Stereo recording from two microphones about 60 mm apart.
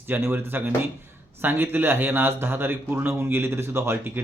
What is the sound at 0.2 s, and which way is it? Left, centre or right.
A man's voice, right.